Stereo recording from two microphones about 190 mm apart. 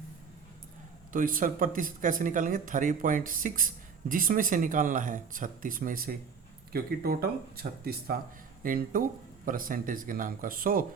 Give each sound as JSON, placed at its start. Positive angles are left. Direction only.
{"t": 1.1, "sound": "speech", "side_deg": -45}